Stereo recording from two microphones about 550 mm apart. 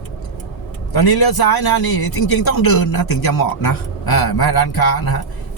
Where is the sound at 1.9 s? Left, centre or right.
Left.